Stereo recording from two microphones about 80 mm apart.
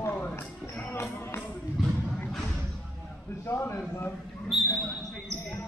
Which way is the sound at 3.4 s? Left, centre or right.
Left.